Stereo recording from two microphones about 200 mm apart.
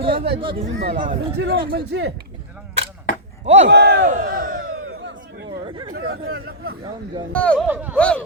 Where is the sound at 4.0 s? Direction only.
40° right (ahead or behind).